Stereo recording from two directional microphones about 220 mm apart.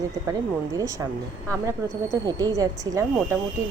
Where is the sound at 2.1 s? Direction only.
15° right (ahead or behind).